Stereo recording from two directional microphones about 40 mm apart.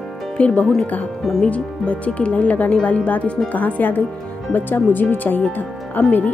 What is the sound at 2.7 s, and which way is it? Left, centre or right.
Speech, left.